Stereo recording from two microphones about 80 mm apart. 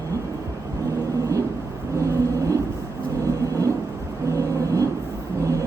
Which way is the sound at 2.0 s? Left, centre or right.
Right.